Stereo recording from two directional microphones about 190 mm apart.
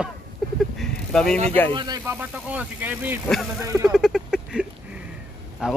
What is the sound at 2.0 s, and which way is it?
Speech, 10° right (ahead or behind).